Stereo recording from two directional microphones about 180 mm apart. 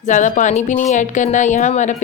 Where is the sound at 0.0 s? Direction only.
45° left (ahead or behind).